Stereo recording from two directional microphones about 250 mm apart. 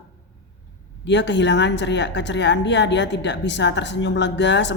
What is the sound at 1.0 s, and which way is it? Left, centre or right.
A woman's voice, left.